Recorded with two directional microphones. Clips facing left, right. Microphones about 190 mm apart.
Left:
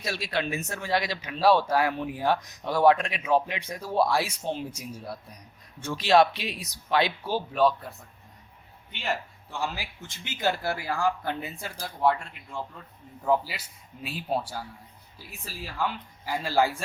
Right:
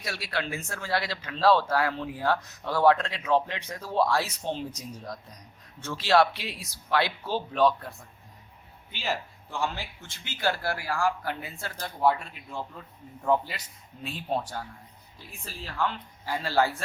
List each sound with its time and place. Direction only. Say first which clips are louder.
0.0 s speech: left 3 dB; 20° left (ahead or behind)
11.9 s a man's voice: even; 5° right (ahead or behind); by 16.8 s 10° left (ahead or behind)